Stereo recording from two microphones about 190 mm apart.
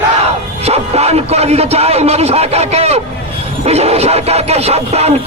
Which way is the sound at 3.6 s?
35° right (ahead or behind).